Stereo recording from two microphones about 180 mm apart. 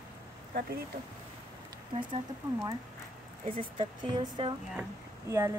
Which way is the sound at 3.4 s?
30° right (ahead or behind).